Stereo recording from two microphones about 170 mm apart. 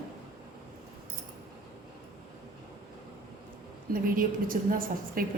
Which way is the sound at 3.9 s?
55° right (ahead or behind).